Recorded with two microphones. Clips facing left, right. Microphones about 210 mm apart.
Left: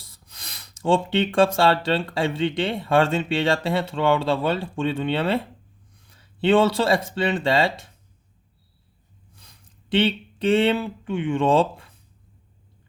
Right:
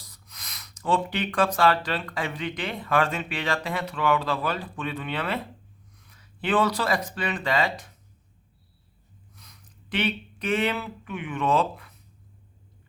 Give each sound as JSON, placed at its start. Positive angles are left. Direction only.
{"t": 0.0, "sound": "speech", "side_deg": 30}
{"t": 9.3, "sound": "speech", "side_deg": 30}